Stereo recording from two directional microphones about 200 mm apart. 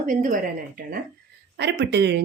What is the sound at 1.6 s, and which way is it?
Speech, 60° right (ahead or behind).